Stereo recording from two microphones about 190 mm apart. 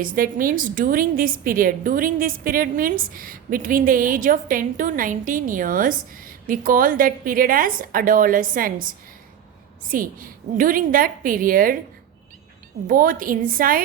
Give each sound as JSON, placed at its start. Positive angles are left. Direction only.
{"t": 0.0, "sound": "a woman's voice", "side_deg": -45}
{"t": 12.9, "sound": "a woman's voice", "side_deg": -45}